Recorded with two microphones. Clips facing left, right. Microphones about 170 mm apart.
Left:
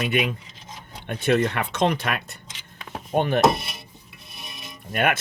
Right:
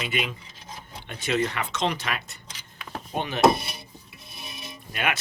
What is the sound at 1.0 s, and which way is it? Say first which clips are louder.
Speech: left 5 dB; 55° left (ahead or behind).